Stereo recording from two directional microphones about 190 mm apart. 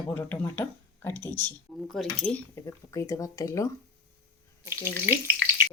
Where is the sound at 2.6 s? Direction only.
15° left (ahead or behind).